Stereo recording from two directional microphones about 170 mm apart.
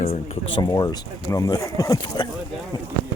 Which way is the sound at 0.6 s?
25° left (ahead or behind).